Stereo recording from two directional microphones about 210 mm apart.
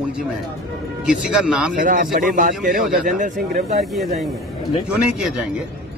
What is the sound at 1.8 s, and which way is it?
A man's voice, 40° right (ahead or behind).